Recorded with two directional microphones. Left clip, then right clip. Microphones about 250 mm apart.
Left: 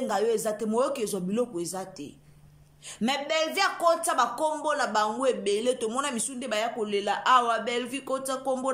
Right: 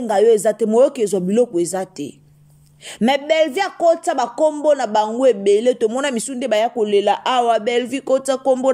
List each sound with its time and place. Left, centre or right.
0.0 s speech: right